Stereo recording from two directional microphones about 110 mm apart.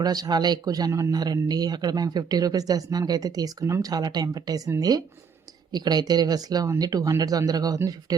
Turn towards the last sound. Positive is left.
turn(degrees=-35)  # may be behind; listen again after turning